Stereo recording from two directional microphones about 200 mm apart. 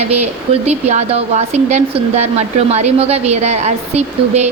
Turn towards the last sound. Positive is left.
turn(degrees=-35)  # may be behind; listen again after turning